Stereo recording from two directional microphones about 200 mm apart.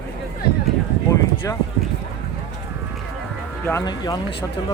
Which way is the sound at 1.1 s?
15° left (ahead or behind).